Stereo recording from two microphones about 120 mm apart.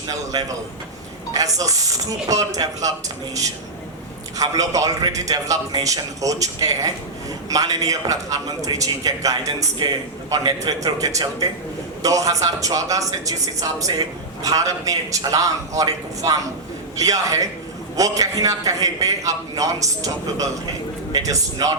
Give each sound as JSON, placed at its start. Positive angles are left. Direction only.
{"t": 0.1, "sound": "a man's voice", "side_deg": -30}
{"t": 4.4, "sound": "a man's voice", "side_deg": -30}